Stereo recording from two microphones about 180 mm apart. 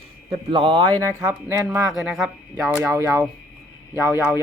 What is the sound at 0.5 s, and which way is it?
Speech, 25° right (ahead or behind).